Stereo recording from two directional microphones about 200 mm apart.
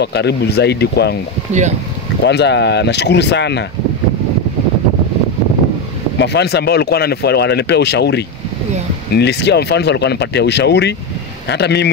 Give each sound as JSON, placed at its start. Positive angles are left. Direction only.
{"t": 0.0, "sound": "speech", "side_deg": 55}
{"t": 2.2, "sound": "speech", "side_deg": 60}
{"t": 6.1, "sound": "speech", "side_deg": 60}